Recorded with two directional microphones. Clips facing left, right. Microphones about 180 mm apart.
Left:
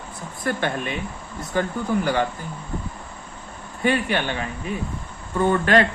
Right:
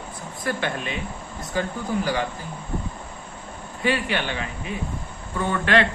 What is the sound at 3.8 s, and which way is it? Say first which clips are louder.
A man's voice: left 2 dB; 50° left (ahead or behind).